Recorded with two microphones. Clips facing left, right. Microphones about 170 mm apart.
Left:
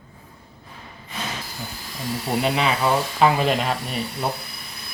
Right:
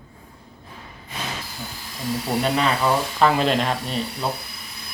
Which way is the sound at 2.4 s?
5° left (ahead or behind).